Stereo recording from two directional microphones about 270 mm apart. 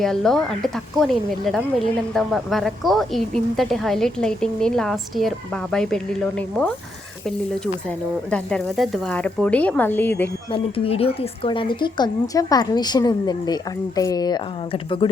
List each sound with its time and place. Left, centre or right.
0.0 s speech: centre
10.5 s speech: left